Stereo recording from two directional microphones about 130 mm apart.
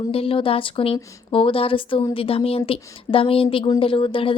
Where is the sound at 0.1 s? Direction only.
45° left (ahead or behind).